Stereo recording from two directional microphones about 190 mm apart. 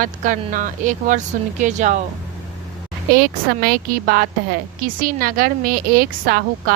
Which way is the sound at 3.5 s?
50° right (ahead or behind).